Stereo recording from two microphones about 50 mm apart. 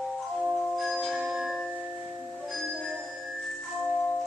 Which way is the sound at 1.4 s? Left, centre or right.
Centre.